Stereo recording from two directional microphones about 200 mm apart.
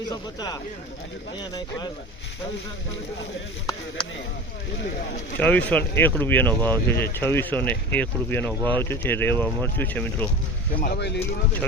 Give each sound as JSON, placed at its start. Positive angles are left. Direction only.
{"t": 0.1, "sound": "speech", "side_deg": 20}
{"t": 5.4, "sound": "speech", "side_deg": 10}
{"t": 10.8, "sound": "speech", "side_deg": 50}